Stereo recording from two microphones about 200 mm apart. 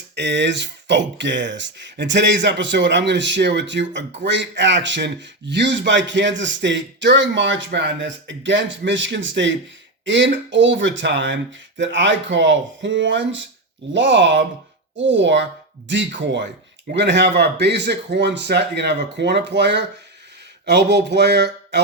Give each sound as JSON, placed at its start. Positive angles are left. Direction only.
{"t": 0.2, "sound": "speech", "side_deg": -60}